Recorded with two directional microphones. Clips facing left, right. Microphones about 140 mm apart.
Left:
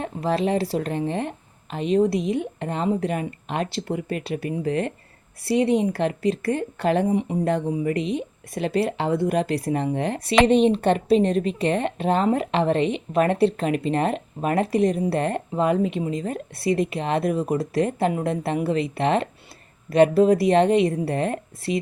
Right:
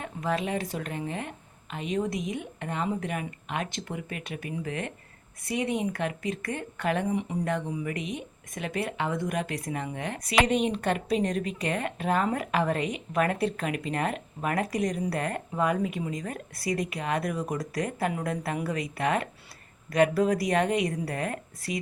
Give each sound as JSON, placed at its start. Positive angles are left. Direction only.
{"t": 0.0, "sound": "speech", "side_deg": 35}